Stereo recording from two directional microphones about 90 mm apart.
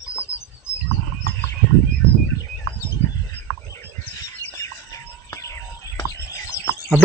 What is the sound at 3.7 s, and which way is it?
Chicken, 35° left (ahead or behind).